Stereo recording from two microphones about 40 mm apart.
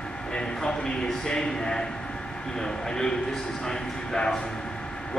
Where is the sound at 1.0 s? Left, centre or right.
Centre.